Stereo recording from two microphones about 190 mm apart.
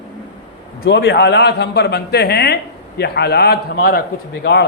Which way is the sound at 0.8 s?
60° left (ahead or behind).